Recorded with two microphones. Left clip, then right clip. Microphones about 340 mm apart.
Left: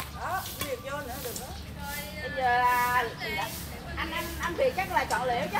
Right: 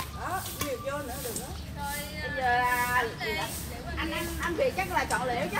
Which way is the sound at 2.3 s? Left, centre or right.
Left.